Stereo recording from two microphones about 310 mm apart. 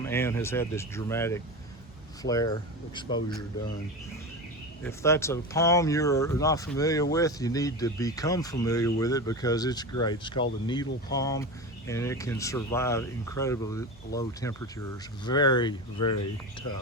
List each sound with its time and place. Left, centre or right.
0.0 s speech: centre
4.8 s speech: centre